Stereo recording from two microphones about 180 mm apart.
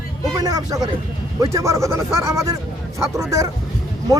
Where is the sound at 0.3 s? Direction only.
20° right (ahead or behind).